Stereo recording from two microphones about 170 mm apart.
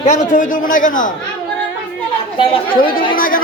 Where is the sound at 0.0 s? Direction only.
45° left (ahead or behind).